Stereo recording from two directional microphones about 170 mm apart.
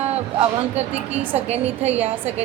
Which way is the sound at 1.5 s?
40° right (ahead or behind).